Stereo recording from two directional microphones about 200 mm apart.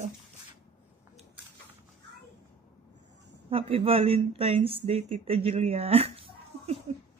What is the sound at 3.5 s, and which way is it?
Speech, 30° right (ahead or behind).